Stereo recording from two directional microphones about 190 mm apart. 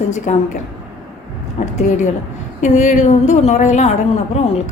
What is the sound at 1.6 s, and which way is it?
A woman's voice, 40° left (ahead or behind).